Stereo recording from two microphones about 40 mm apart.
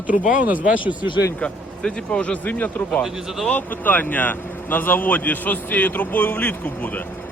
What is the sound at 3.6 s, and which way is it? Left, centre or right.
Speech, left.